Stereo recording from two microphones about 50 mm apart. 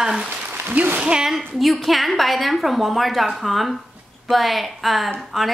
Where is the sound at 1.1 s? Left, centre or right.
Centre.